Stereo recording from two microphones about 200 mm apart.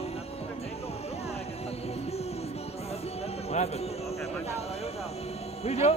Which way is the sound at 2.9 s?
30° left (ahead or behind).